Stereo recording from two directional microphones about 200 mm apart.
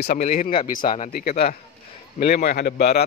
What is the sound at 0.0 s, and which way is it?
Speech, 45° left (ahead or behind).